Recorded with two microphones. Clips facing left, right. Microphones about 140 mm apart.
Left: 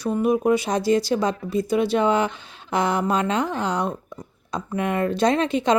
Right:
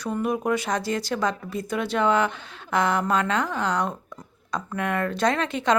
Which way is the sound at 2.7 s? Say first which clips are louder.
Left 1 dB; 15° left (ahead or behind).